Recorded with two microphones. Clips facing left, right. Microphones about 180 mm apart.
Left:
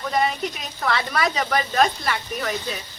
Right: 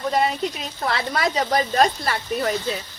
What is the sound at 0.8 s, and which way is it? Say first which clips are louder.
Speech: even; 25° right (ahead or behind).